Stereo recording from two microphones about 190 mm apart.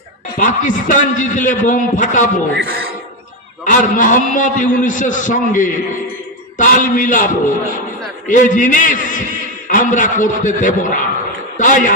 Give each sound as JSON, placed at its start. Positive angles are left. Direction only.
{"t": 0.3, "sound": "a man's voice", "side_deg": 40}
{"t": 3.6, "sound": "a man's voice", "side_deg": 45}